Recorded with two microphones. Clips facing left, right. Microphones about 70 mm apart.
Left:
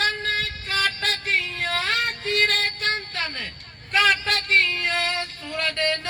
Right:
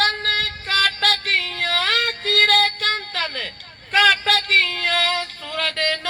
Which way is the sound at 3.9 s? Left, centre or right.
Right.